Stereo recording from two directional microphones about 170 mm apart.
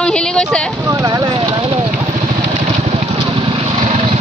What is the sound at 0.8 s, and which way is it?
Speech, 20° right (ahead or behind).